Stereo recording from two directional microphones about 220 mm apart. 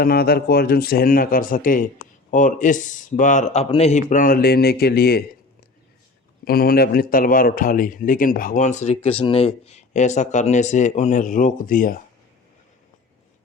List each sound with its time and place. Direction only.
0.0 s speech: 45° left (ahead or behind)
6.4 s speech: 45° left (ahead or behind)